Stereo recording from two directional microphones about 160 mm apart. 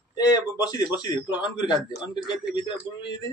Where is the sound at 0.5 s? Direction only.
25° left (ahead or behind).